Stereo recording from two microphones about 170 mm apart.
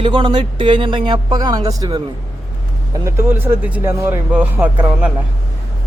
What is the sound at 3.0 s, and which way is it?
Speech, 15° right (ahead or behind).